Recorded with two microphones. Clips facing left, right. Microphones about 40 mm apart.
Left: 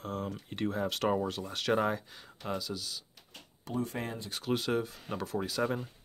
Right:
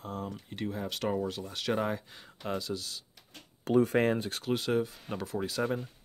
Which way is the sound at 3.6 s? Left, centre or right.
Right.